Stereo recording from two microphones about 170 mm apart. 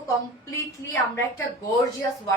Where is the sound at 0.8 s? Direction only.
20° left (ahead or behind).